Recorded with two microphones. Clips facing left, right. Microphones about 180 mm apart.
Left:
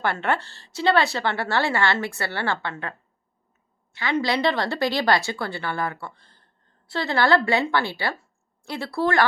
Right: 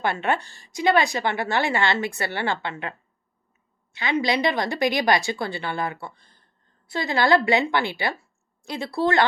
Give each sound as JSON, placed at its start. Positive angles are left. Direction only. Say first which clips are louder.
{"t": 0.0, "sound": "a woman's voice", "louder": "even", "side_deg": -15}
{"t": 3.9, "sound": "speech", "louder": "even", "side_deg": -20}